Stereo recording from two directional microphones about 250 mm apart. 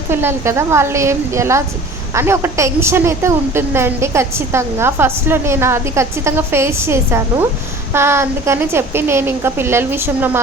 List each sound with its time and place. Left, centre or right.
0.1 s a woman's voice: centre